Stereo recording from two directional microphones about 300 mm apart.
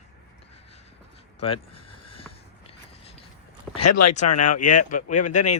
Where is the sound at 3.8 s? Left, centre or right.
Left.